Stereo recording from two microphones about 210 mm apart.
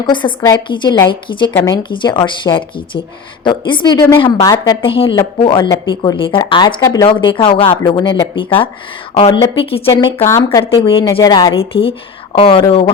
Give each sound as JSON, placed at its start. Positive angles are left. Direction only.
{"t": 0.0, "sound": "a woman's voice", "side_deg": 20}
{"t": 10.2, "sound": "speech", "side_deg": 15}
{"t": 10.8, "sound": "a woman's voice", "side_deg": 25}